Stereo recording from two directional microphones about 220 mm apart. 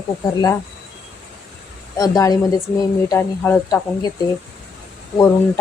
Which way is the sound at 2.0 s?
15° left (ahead or behind).